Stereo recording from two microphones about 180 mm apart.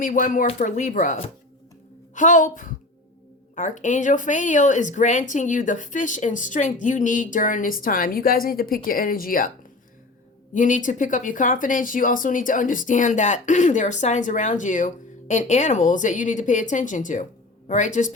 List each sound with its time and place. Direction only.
0.0 s speech: 50° left (ahead or behind)
10.5 s speech: 45° left (ahead or behind)